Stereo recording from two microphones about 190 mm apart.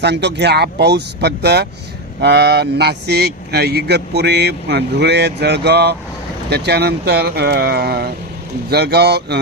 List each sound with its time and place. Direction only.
0.0 s speech: 60° right (ahead or behind)